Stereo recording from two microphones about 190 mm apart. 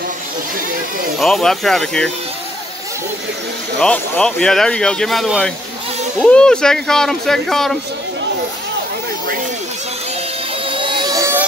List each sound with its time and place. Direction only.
1.2 s speech: centre (ahead or behind)
3.8 s speech: 5° left (ahead or behind)
10.7 s music: 25° right (ahead or behind)